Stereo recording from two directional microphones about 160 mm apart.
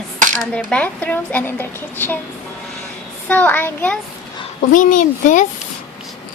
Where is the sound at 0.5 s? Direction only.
5° left (ahead or behind).